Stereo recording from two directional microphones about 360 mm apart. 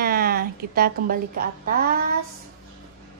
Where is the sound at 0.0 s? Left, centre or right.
Right.